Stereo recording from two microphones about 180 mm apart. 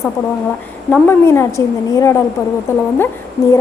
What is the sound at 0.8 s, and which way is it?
A woman's voice, 10° left (ahead or behind).